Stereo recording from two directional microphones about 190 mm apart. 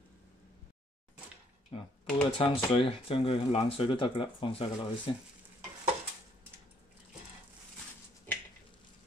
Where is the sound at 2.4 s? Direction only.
25° left (ahead or behind).